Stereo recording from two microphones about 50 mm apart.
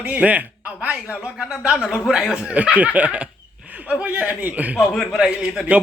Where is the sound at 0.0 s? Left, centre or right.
Right.